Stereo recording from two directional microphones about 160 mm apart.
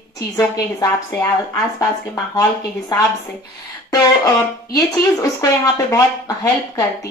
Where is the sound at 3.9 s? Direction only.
20° left (ahead or behind).